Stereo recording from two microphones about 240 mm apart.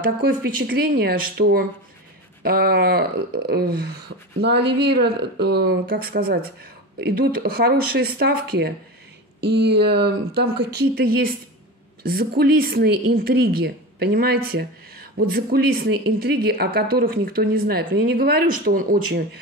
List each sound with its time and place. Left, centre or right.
0.0 s speech: right